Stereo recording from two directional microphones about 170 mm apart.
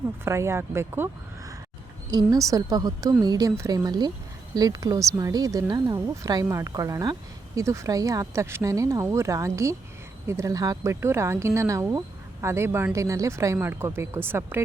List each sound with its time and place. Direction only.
0.3 s speech: 15° right (ahead or behind)